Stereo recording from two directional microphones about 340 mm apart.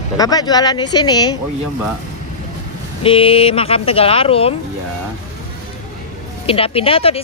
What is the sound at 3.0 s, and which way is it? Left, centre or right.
Speech, centre.